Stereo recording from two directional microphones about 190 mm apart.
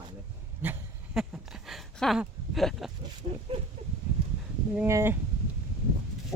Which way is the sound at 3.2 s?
35° right (ahead or behind).